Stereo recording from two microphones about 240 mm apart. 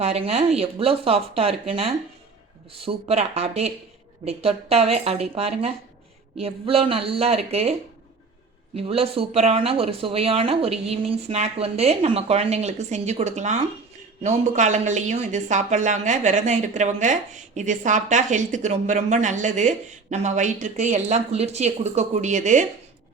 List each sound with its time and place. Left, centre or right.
0.0 s speech: right
8.7 s speech: right